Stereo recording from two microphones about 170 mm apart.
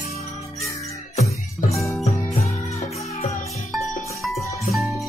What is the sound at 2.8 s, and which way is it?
Music, 40° left (ahead or behind).